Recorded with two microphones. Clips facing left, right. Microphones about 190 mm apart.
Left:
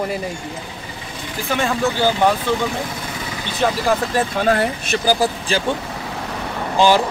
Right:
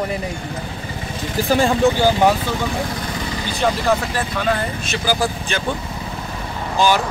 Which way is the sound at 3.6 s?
Centre (ahead or behind).